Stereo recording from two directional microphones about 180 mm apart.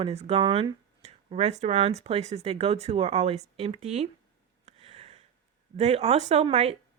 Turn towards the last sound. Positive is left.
turn(degrees=-35)  # may be behind; listen again after turning